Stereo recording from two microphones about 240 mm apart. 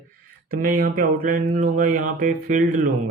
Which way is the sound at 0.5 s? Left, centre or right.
Right.